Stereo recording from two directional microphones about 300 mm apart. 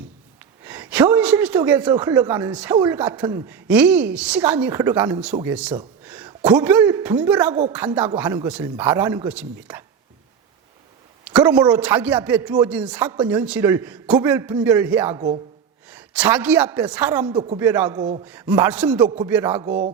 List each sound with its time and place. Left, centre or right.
0.6 s a woman's voice: centre
11.3 s speech: centre
17.2 s speech: centre
17.6 s speech: centre
19.6 s speech: right